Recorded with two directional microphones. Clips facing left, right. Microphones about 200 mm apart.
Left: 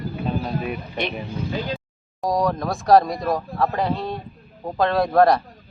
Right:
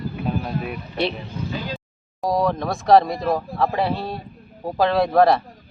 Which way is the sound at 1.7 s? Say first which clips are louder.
Left 2 dB; centre (ahead or behind).